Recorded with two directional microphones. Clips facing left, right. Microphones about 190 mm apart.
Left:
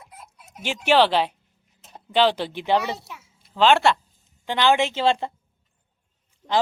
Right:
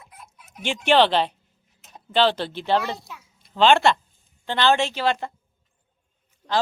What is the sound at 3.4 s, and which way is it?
A child's voice, 5° left (ahead or behind).